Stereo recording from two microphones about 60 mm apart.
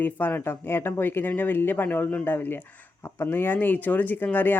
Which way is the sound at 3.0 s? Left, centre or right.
Left.